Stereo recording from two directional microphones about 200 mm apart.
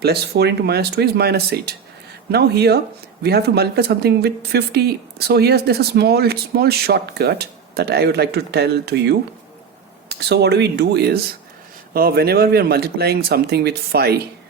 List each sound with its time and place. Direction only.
0.0 s speech: 55° right (ahead or behind)